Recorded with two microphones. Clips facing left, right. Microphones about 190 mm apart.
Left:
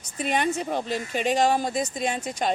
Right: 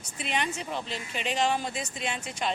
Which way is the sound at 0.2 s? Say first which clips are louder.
Left 7 dB; 45° left (ahead or behind).